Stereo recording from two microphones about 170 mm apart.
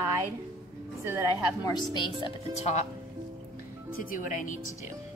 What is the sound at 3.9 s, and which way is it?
Speech, 55° left (ahead or behind).